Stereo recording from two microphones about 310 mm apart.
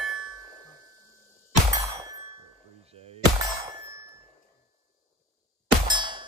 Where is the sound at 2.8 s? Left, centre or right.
Centre.